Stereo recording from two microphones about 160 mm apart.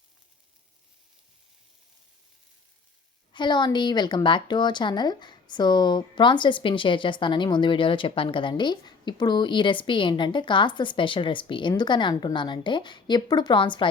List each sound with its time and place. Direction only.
3.3 s a woman's voice: 30° left (ahead or behind)